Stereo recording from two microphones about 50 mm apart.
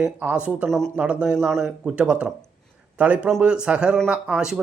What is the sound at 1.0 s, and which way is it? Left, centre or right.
A man's voice, right.